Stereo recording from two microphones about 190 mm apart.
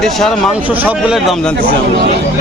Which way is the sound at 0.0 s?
Centre (ahead or behind).